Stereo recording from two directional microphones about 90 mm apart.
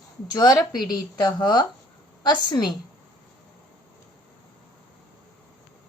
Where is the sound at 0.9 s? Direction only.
50° left (ahead or behind).